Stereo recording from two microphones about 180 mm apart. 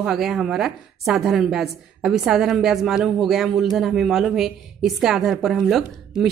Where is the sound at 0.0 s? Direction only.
Centre (ahead or behind).